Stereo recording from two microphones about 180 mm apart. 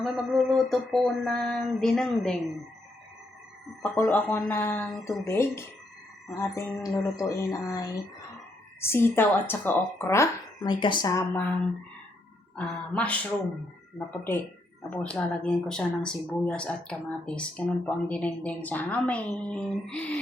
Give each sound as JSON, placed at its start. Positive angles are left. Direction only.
{"t": 0.0, "sound": "a sound", "side_deg": 0}
{"t": 3.8, "sound": "a woman's voice", "side_deg": 10}
{"t": 12.5, "sound": "a woman's voice", "side_deg": 5}